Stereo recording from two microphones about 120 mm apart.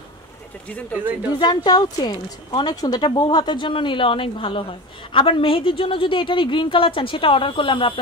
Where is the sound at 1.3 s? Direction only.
35° left (ahead or behind).